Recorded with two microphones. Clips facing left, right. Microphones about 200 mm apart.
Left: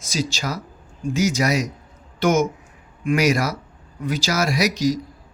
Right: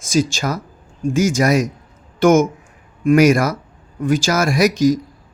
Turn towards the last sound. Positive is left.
turn(degrees=-50)  # may be behind; listen again after turning